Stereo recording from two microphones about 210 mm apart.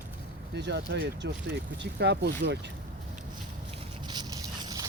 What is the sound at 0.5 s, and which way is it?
Speech, 55° right (ahead or behind).